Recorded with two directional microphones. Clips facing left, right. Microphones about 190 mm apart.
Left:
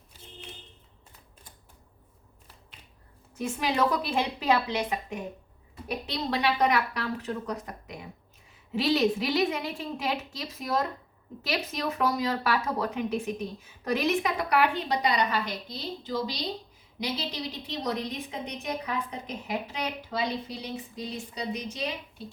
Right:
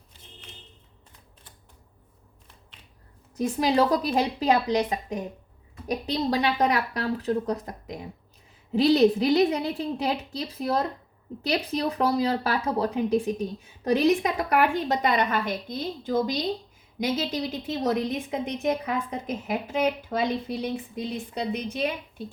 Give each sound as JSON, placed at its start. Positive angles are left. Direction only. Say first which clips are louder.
{"t": 3.3, "sound": "a woman's voice", "louder": "right 6 dB", "side_deg": -35}